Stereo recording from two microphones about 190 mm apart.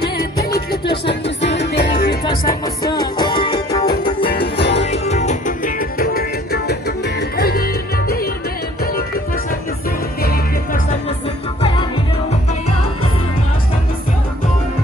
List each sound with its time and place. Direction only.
0.0 s music: 55° left (ahead or behind)
2.2 s music: 20° left (ahead or behind)
4.6 s music: 65° left (ahead or behind)
4.9 s music: 35° left (ahead or behind)